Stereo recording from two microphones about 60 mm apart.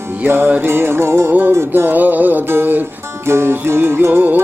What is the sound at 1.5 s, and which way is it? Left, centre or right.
Music, right.